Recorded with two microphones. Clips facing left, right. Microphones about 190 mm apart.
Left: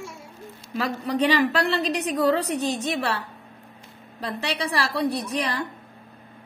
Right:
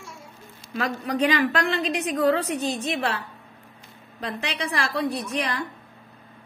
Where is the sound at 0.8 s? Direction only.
35° left (ahead or behind).